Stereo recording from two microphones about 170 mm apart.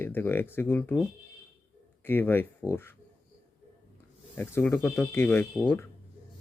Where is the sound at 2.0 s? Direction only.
10° left (ahead or behind).